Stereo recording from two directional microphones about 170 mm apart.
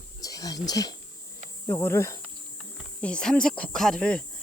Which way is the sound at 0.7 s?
20° left (ahead or behind).